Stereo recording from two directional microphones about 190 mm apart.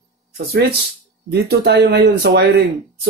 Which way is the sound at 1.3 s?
60° right (ahead or behind).